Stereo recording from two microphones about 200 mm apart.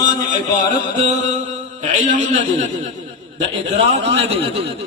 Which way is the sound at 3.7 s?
30° right (ahead or behind).